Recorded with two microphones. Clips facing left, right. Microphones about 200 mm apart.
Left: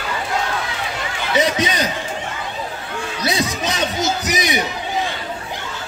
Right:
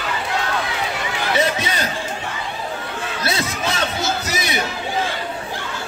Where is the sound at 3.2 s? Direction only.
15° left (ahead or behind).